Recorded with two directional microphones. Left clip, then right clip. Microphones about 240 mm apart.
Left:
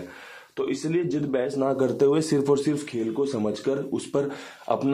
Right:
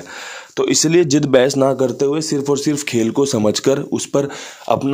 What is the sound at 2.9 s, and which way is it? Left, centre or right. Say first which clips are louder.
A man's voice: right 10 dB; right.